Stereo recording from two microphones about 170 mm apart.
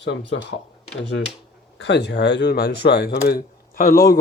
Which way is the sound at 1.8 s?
90° left.